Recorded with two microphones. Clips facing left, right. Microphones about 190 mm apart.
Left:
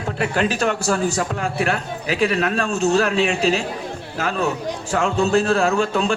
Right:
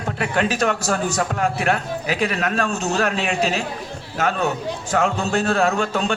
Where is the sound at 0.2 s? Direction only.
35° left (ahead or behind).